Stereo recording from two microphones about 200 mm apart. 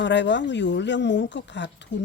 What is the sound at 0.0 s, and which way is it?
Speech, 60° left (ahead or behind).